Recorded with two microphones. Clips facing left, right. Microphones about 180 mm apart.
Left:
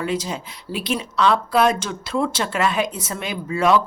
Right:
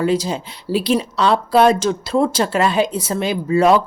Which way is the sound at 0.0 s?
35° right (ahead or behind).